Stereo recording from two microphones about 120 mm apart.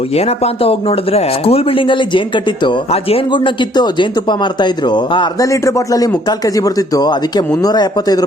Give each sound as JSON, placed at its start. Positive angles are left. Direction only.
{"t": 0.1, "sound": "speech", "side_deg": 60}
{"t": 2.9, "sound": "speech", "side_deg": 55}
{"t": 3.3, "sound": "speech", "side_deg": 40}
{"t": 5.5, "sound": "speech", "side_deg": 25}